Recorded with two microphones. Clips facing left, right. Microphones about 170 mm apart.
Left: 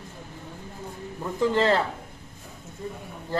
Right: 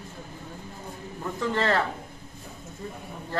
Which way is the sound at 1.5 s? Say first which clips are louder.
Left 3 dB; 15° left (ahead or behind).